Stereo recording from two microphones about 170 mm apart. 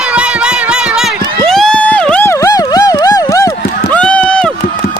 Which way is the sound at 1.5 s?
5° left (ahead or behind).